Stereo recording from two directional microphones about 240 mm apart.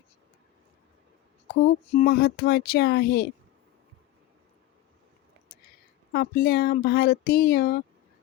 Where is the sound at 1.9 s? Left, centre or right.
Left.